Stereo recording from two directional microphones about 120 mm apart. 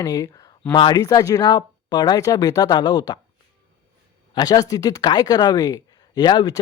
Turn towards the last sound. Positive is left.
turn(degrees=35)  # may be behind; listen again after turning